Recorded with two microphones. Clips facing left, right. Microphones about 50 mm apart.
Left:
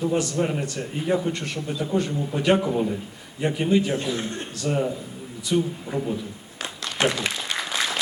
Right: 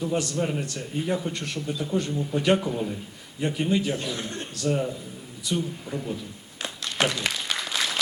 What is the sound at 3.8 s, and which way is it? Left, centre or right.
Speech, left.